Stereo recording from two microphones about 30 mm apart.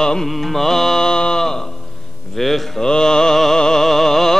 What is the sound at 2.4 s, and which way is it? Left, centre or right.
Mantra, centre.